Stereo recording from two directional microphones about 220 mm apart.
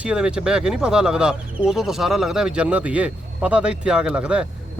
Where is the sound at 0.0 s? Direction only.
5° right (ahead or behind).